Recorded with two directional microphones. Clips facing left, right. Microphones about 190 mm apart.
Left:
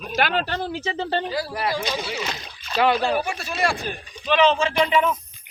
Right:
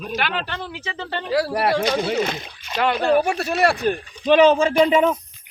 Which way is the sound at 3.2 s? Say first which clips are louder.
Right 6 dB; 65° right (ahead or behind).